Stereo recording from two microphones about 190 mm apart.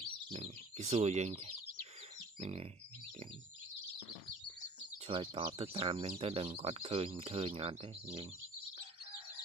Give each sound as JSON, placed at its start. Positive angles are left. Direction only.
{"t": 0.3, "sound": "speech", "side_deg": -35}
{"t": 2.4, "sound": "speech", "side_deg": -35}
{"t": 5.0, "sound": "speech", "side_deg": -30}